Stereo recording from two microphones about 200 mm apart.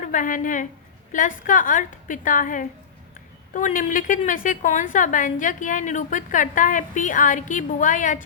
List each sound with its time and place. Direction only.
0.0 s a woman's voice: 40° left (ahead or behind)